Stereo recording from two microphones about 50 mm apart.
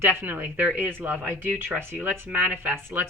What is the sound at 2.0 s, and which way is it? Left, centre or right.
A woman's voice, right.